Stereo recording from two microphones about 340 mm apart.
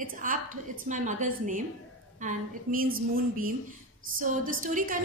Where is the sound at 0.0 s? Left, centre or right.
Right.